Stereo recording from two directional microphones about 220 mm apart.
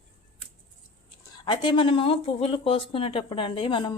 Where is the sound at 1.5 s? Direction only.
20° left (ahead or behind).